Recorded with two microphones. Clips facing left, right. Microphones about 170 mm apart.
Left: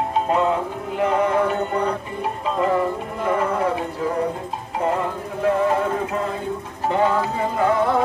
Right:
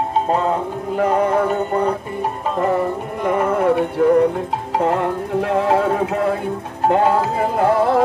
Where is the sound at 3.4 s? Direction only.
65° right (ahead or behind).